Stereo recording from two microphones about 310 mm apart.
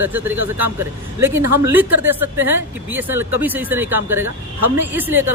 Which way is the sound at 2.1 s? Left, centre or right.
Centre.